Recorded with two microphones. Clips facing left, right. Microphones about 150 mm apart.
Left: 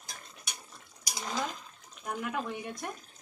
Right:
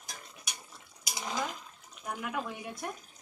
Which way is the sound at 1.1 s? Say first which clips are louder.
Even; 5° right (ahead or behind).